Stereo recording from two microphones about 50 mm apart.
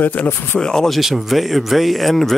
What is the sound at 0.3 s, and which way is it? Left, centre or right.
Speech, left.